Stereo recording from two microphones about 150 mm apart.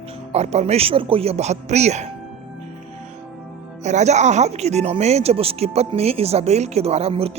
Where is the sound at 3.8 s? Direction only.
50° right (ahead or behind).